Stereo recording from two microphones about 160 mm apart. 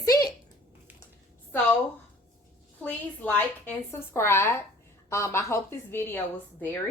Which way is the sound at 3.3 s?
15° left (ahead or behind).